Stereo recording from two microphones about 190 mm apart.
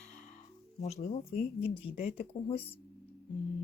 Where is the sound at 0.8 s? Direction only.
35° left (ahead or behind).